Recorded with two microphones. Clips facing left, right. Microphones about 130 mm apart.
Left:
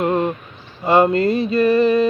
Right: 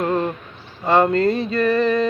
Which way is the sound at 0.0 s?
20° left (ahead or behind).